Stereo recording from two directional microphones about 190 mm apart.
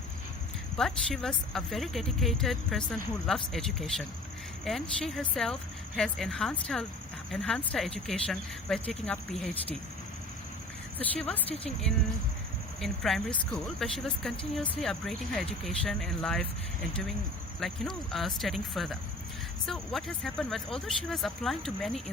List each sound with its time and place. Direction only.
0.8 s speech: centre (ahead or behind)
10.9 s speech: 5° left (ahead or behind)
11.4 s a woman's voice: 30° left (ahead or behind)
12.8 s speech: centre (ahead or behind)
17.6 s speech: centre (ahead or behind)